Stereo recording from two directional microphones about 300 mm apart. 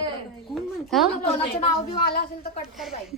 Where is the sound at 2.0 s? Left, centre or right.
Left.